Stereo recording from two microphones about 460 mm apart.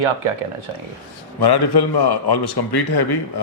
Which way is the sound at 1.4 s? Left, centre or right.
Left.